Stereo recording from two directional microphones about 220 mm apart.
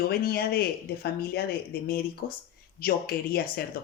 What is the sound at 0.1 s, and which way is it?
Speech, 45° left (ahead or behind).